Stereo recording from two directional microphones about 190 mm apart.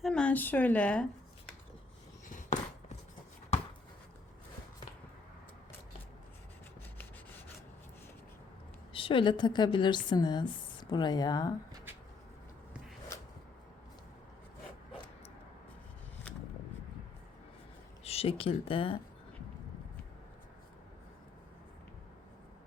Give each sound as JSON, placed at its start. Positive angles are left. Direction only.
{"t": 0.0, "sound": "a woman's voice", "side_deg": 5}
{"t": 7.0, "sound": "rub", "side_deg": 10}
{"t": 8.9, "sound": "a woman's voice", "side_deg": 30}
{"t": 18.0, "sound": "speech", "side_deg": 30}